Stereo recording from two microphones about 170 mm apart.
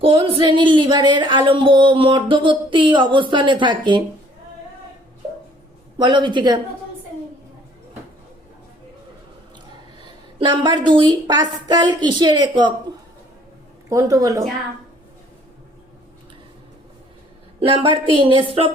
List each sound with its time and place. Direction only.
0.0 s speech: 30° right (ahead or behind)
6.0 s speech: 25° right (ahead or behind)
10.0 s a woman's voice: 25° right (ahead or behind)
13.9 s speech: 20° right (ahead or behind)
17.6 s a woman's voice: 30° right (ahead or behind)